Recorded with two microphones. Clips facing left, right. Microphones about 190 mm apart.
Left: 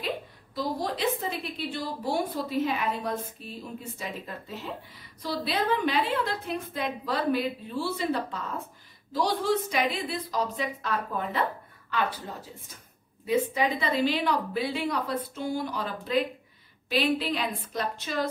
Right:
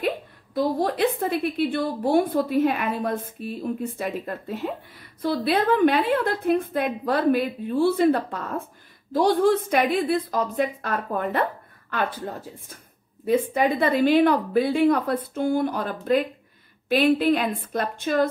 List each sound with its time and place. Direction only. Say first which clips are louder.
0.6 s a woman's voice: right 8 dB; 55° right (ahead or behind)